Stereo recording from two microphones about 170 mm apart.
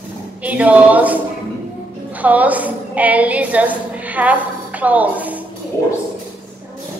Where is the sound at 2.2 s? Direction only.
10° right (ahead or behind).